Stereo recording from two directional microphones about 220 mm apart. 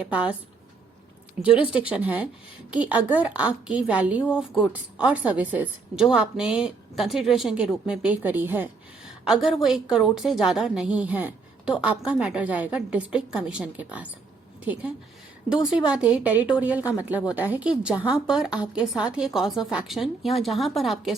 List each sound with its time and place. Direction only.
0.1 s a woman's voice: 5° right (ahead or behind)
1.5 s speech: 25° left (ahead or behind)
1.7 s a woman's voice: 5° right (ahead or behind)